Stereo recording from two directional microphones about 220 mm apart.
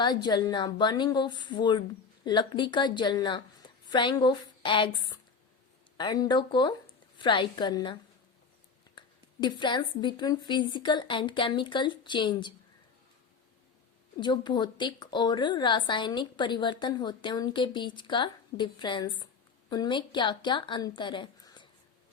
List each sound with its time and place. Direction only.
0.0 s a woman's voice: 20° left (ahead or behind)
9.0 s a woman's voice: 20° left (ahead or behind)
14.2 s a woman's voice: 20° left (ahead or behind)